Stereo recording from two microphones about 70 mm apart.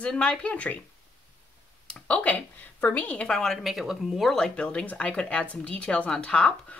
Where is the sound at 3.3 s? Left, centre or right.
Centre.